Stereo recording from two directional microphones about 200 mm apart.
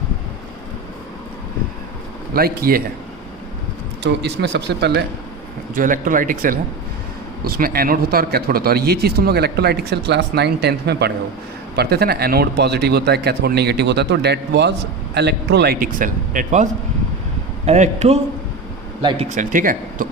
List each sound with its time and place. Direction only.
2.3 s speech: 50° right (ahead or behind)
4.0 s speech: 60° right (ahead or behind)
5.7 s speech: 40° right (ahead or behind)
17.7 s speech: 35° right (ahead or behind)
19.3 s speech: 40° right (ahead or behind)